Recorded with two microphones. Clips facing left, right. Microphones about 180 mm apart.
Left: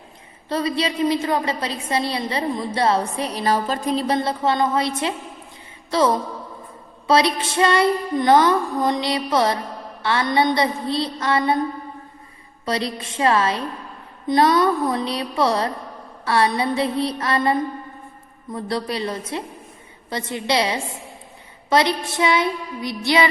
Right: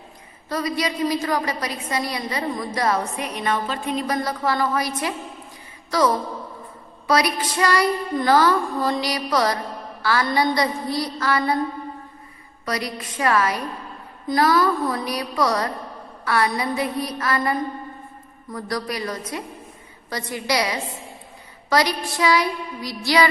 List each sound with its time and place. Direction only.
0.4 s a woman's voice: 30° left (ahead or behind)
12.6 s a woman's voice: 30° left (ahead or behind)